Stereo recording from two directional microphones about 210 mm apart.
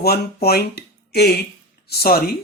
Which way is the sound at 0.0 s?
50° left (ahead or behind).